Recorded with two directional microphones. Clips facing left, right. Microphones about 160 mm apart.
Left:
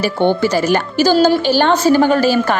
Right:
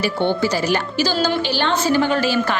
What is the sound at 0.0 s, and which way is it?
A woman's voice, 50° left (ahead or behind).